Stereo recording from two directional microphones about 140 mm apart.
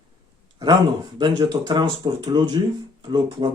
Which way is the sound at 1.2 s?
35° right (ahead or behind).